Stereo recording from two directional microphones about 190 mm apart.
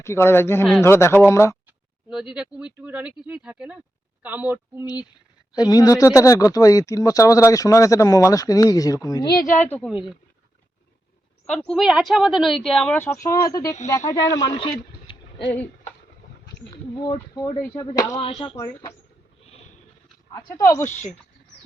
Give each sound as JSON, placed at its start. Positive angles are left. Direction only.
{"t": 0.0, "sound": "speech", "side_deg": 15}
{"t": 2.3, "sound": "a woman's voice", "side_deg": -5}
{"t": 5.5, "sound": "speech", "side_deg": 20}
{"t": 9.6, "sound": "speech", "side_deg": 10}
{"t": 11.5, "sound": "speech", "side_deg": 5}
{"t": 17.1, "sound": "speech", "side_deg": 20}
{"t": 18.2, "sound": "speech", "side_deg": 30}
{"t": 18.5, "sound": "speech", "side_deg": 20}
{"t": 20.3, "sound": "speech", "side_deg": 15}
{"t": 20.8, "sound": "speech", "side_deg": 40}